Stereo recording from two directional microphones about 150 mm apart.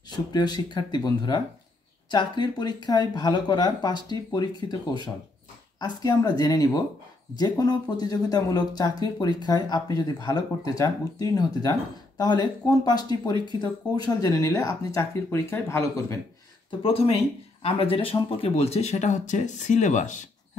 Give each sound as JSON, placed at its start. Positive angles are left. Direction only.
{"t": 0.1, "sound": "speech", "side_deg": 30}
{"t": 16.8, "sound": "speech", "side_deg": 40}